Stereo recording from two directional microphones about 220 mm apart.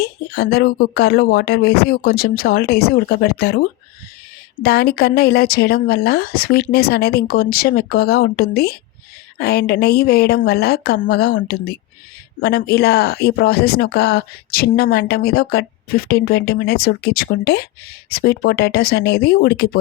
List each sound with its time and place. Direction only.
0.0 s speech: 45° left (ahead or behind)